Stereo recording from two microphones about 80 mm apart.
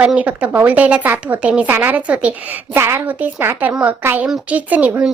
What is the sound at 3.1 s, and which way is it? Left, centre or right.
A woman's voice, right.